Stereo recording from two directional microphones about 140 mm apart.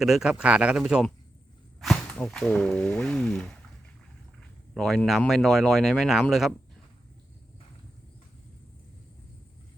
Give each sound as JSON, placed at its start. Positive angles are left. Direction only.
{"t": 0.0, "sound": "speech", "side_deg": -5}
{"t": 4.7, "sound": "speech", "side_deg": 0}